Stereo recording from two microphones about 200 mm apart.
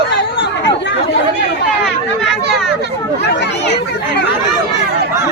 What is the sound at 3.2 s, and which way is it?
Speech, 55° left (ahead or behind).